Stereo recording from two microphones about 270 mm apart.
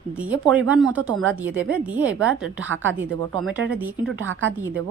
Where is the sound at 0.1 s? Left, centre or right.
Centre.